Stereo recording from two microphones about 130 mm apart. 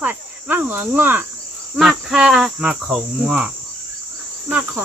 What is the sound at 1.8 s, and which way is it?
Cricket, 5° right (ahead or behind).